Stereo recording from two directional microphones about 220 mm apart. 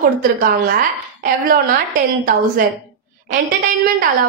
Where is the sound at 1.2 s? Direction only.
40° right (ahead or behind).